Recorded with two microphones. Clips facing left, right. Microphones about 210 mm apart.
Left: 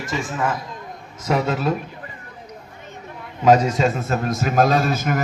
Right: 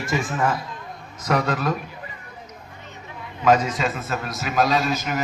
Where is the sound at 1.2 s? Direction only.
25° left (ahead or behind).